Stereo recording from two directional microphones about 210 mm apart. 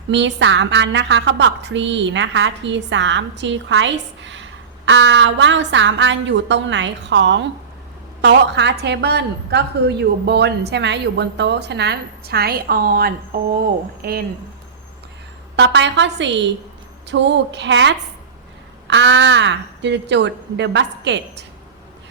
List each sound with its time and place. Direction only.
0.1 s a woman's voice: 55° right (ahead or behind)
15.5 s a woman's voice: 55° right (ahead or behind)